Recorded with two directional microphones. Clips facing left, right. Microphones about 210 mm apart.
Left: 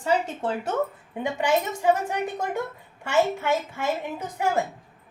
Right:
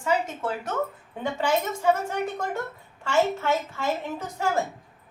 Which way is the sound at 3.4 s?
15° left (ahead or behind).